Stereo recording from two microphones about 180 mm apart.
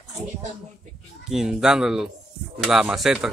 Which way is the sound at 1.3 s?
5° right (ahead or behind).